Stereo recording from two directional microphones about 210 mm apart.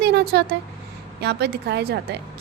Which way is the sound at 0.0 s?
50° right (ahead or behind).